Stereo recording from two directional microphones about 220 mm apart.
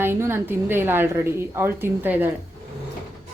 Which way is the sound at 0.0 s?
10° right (ahead or behind).